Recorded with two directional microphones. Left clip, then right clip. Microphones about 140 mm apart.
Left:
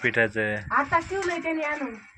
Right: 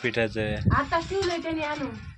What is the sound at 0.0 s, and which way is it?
Speech, 15° right (ahead or behind).